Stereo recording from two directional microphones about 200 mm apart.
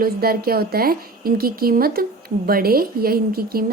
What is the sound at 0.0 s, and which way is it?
A woman's voice, 50° right (ahead or behind).